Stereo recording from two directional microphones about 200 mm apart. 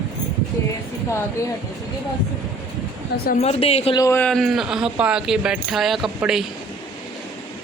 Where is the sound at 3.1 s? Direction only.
55° left (ahead or behind).